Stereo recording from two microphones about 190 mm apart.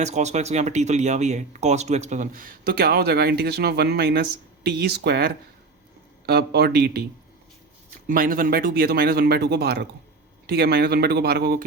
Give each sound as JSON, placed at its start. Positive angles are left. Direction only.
{"t": 0.0, "sound": "speech", "side_deg": -35}
{"t": 8.0, "sound": "speech", "side_deg": -45}